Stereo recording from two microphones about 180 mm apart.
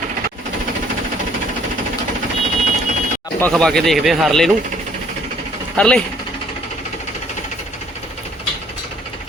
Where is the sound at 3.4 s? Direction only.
5° left (ahead or behind).